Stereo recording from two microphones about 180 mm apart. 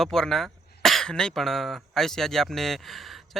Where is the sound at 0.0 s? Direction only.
Centre (ahead or behind).